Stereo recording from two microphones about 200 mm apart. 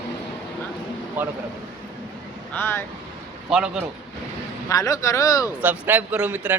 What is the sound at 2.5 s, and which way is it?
Speech, 10° left (ahead or behind).